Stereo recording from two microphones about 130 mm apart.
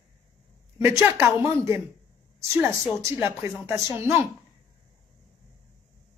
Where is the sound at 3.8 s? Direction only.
20° right (ahead or behind).